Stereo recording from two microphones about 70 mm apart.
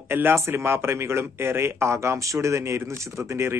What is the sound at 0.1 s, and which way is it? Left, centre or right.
A man's voice, right.